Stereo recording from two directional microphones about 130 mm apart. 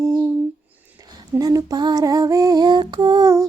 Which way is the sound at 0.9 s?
25° right (ahead or behind).